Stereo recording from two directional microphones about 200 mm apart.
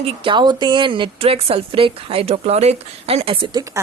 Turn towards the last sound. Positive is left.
turn(degrees=-25)  # may be behind; listen again after turning